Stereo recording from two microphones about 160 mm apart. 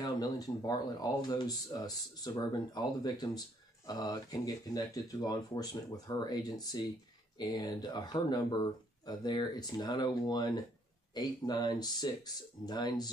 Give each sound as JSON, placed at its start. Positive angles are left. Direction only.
{"t": 0.0, "sound": "speech", "side_deg": 25}